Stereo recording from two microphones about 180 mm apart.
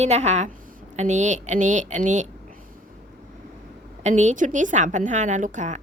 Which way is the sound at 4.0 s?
40° right (ahead or behind).